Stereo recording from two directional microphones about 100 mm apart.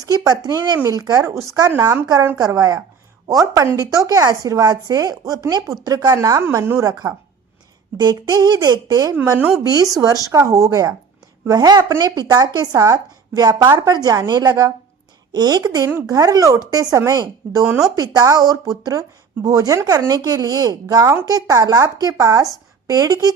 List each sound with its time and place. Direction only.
0.0 s speech: 40° right (ahead or behind)
9.2 s speech: 30° right (ahead or behind)